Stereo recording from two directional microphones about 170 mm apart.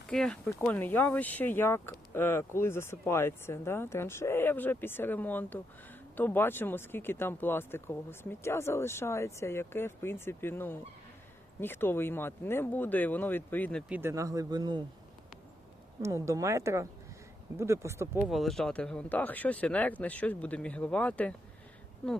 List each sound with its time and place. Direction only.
0.1 s speech: 5° left (ahead or behind)
13.8 s speech: 10° right (ahead or behind)
16.0 s a woman's voice: 15° right (ahead or behind)
18.2 s speech: centre (ahead or behind)